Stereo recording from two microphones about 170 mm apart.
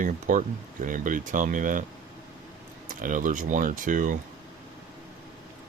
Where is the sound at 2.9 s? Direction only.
50° right (ahead or behind).